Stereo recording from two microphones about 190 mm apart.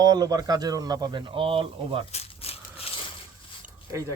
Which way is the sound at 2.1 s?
30° left (ahead or behind).